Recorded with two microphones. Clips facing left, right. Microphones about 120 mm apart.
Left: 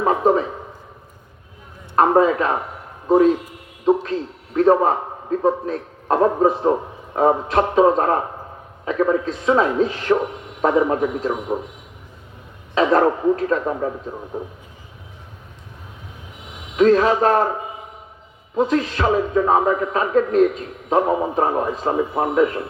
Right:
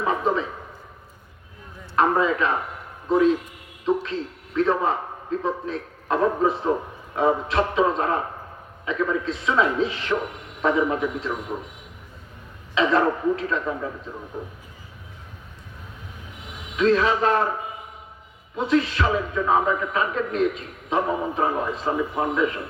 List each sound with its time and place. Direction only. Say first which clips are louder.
0.0 s a sound: left 6 dB; 40° left (ahead or behind)
2.0 s a man's voice: left 5 dB; 45° left (ahead or behind)
11.5 s a man's voice: left 7 dB; 25° left (ahead or behind)
12.7 s a man's voice: left 4 dB; 45° left (ahead or behind)
16.7 s a man's voice: left 5 dB; 40° left (ahead or behind)
18.5 s a man's voice: left 2 dB; 40° left (ahead or behind)